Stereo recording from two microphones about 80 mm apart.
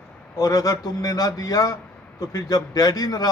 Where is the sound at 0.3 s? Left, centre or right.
Left.